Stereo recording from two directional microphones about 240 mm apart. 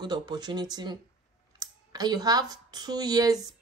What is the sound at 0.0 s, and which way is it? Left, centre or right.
A woman's voice, centre.